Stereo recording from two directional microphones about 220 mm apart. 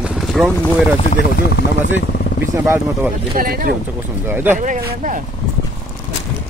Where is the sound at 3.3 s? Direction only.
40° right (ahead or behind).